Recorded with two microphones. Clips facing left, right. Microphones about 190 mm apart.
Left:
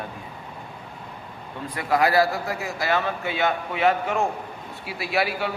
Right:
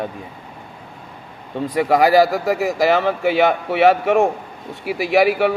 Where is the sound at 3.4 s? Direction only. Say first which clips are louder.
Right 4 dB; 75° right (ahead or behind).